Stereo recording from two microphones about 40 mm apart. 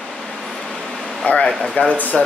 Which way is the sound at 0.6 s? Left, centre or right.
Centre.